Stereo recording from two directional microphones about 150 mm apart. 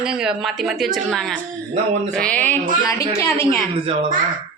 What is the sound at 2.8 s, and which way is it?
Speech, 20° left (ahead or behind).